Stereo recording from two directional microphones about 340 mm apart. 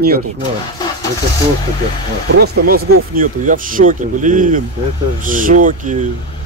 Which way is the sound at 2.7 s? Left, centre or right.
Right.